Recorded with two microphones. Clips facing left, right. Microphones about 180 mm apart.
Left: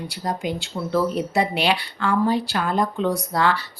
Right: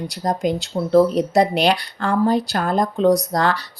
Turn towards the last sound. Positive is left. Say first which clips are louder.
# right 3 dB
turn(degrees=-40)  # may be behind; listen again after turning